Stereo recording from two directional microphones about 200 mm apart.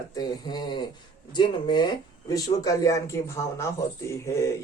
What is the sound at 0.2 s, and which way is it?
Speech, 20° left (ahead or behind).